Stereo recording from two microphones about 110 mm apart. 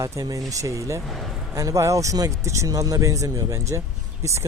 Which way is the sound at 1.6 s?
30° right (ahead or behind).